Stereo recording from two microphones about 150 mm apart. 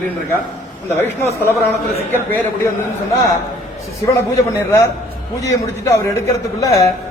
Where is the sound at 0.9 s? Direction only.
15° left (ahead or behind).